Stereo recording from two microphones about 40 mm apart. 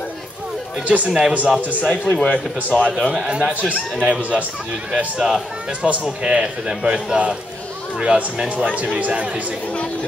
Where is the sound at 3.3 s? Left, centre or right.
Right.